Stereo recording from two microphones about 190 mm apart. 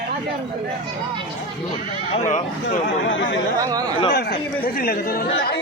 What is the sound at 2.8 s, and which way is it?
Speech, 75° left (ahead or behind).